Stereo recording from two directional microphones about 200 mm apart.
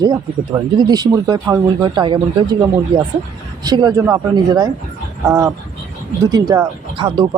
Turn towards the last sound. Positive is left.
turn(degrees=-25)  # may be behind; listen again after turning